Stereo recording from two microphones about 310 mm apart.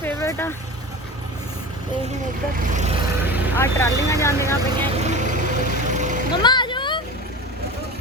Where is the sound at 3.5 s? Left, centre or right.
Centre.